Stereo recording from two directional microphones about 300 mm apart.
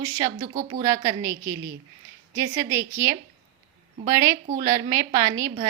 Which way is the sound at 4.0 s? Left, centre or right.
Right.